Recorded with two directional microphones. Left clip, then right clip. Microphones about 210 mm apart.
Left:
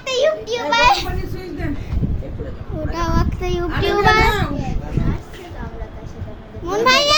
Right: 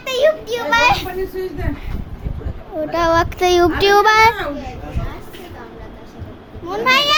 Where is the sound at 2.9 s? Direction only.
30° right (ahead or behind); by 4.3 s 55° right (ahead or behind).